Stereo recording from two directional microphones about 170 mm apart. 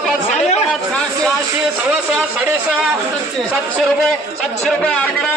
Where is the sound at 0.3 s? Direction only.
40° left (ahead or behind).